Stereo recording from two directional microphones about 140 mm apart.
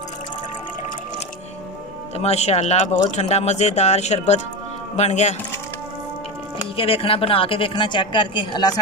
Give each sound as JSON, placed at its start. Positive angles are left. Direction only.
{"t": 2.1, "sound": "speech", "side_deg": 50}
{"t": 6.8, "sound": "a woman's voice", "side_deg": 40}